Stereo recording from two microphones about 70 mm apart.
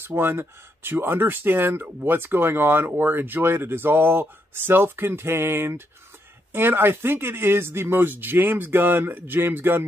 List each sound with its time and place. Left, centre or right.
0.0 s speech: right